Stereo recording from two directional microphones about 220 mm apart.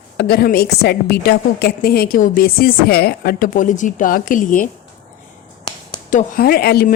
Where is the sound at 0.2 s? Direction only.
45° left (ahead or behind).